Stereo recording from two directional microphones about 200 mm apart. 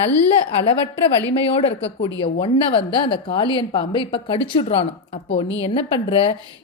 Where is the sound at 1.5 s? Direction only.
30° left (ahead or behind).